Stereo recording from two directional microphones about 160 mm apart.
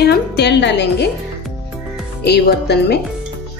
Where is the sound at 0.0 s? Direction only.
90° left.